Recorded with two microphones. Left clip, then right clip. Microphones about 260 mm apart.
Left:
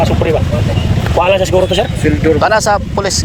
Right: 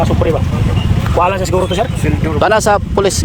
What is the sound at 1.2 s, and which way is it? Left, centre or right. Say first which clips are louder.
Speech: left 5 dB; centre.